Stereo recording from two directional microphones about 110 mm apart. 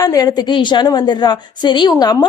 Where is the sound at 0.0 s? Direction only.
35° left (ahead or behind).